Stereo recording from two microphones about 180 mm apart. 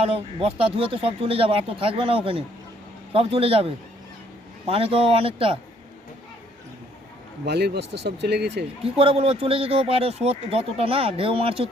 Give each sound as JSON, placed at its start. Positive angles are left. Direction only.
{"t": 0.0, "sound": "speech", "side_deg": -30}
{"t": 7.4, "sound": "speech", "side_deg": -65}
{"t": 8.8, "sound": "speech", "side_deg": -30}